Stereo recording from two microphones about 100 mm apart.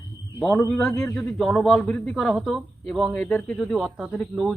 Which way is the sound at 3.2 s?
15° left (ahead or behind).